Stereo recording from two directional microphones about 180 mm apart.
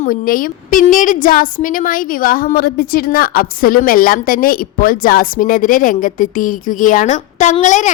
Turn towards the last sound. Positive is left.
turn(degrees=40)  # may be behind; listen again after turning